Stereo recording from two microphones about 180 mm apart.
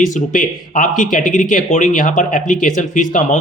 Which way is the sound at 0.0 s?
45° left (ahead or behind).